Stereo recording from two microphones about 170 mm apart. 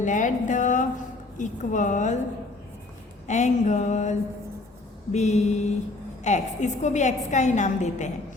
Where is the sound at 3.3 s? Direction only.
45° left (ahead or behind).